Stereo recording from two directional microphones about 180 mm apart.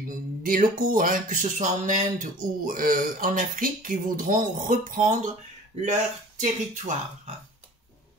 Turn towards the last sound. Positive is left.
turn(degrees=-45)  # may be behind; listen again after turning